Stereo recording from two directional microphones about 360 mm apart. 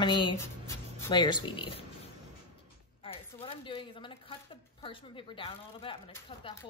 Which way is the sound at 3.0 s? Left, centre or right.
Centre.